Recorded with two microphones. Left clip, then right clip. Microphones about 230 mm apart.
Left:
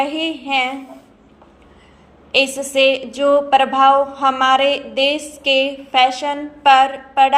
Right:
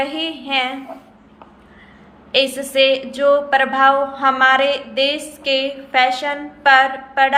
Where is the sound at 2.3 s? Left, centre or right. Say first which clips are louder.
Even; left.